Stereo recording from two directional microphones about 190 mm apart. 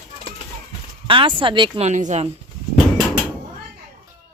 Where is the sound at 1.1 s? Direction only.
25° right (ahead or behind).